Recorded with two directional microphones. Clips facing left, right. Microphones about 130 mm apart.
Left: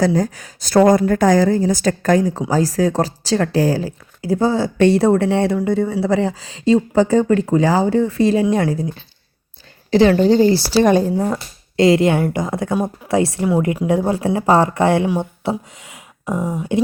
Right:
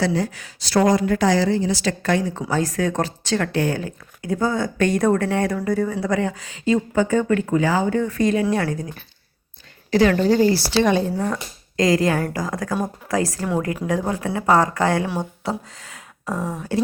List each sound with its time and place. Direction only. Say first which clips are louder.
0.0 s a woman's voice: left 5 dB; 40° left (ahead or behind); by 10.6 s 25° left (ahead or behind)
10.7 s speech: left 5 dB; 40° left (ahead or behind)
11.8 s speech: left 5 dB; 25° left (ahead or behind)
13.4 s speech: left 6 dB; 15° left (ahead or behind)